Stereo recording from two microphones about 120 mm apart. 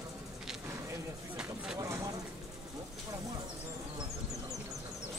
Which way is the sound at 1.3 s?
5° right (ahead or behind).